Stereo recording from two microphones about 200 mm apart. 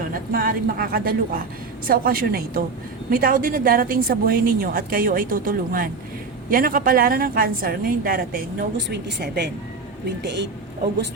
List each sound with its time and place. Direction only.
0.1 s a woman's voice: 45° right (ahead or behind)